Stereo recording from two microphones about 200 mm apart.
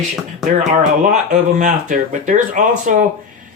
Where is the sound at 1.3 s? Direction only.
40° right (ahead or behind).